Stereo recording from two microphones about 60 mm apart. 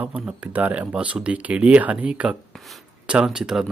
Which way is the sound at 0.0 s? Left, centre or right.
Right.